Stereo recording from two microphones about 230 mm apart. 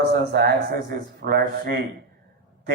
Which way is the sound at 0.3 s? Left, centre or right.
Right.